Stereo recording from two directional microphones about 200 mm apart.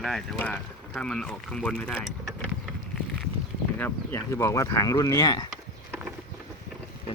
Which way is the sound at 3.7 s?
10° left (ahead or behind).